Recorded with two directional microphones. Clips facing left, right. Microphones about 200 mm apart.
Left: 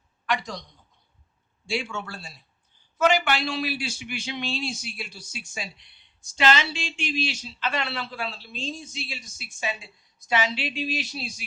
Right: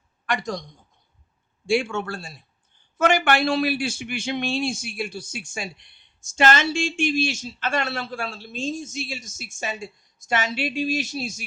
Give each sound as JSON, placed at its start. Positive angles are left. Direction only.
{"t": 0.3, "sound": "a man's voice", "side_deg": -45}